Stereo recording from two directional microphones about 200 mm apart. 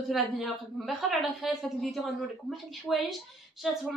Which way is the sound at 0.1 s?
Centre (ahead or behind).